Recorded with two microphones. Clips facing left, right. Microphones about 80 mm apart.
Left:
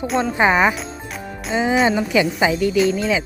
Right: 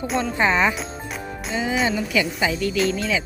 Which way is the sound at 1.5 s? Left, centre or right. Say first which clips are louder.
Left 6 dB; left.